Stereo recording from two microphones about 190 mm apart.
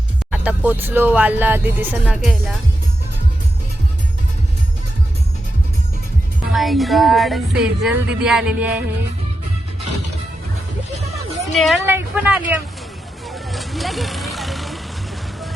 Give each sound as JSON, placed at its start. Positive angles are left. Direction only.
{"t": 0.3, "sound": "speech", "side_deg": -10}
{"t": 6.5, "sound": "speech", "side_deg": 0}
{"t": 10.9, "sound": "music", "side_deg": -35}
{"t": 11.5, "sound": "speech", "side_deg": 0}
{"t": 11.9, "sound": "speech", "side_deg": -10}
{"t": 13.3, "sound": "vehicle", "side_deg": 0}